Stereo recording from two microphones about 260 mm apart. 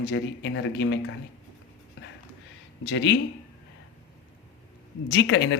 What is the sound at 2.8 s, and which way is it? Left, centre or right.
Speech, left.